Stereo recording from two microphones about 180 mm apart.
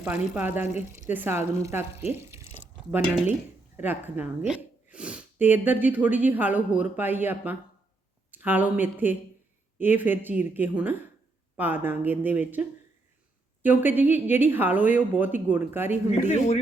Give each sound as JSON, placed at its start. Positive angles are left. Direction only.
{"t": 0.0, "sound": "speech", "side_deg": -10}
{"t": 2.1, "sound": "a sound", "side_deg": -15}
{"t": 3.8, "sound": "speech", "side_deg": -10}
{"t": 16.2, "sound": "a man's voice", "side_deg": 40}